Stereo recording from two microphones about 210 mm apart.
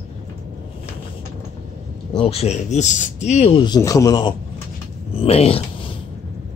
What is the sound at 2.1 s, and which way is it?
Speech, 30° left (ahead or behind).